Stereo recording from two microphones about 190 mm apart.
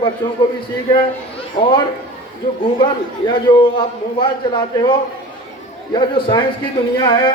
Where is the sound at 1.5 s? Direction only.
25° left (ahead or behind).